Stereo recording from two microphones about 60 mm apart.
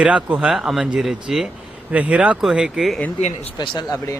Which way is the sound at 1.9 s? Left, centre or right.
Right.